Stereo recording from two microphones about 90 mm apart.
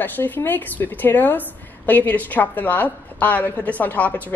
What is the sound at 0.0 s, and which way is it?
A woman's voice, 20° left (ahead or behind).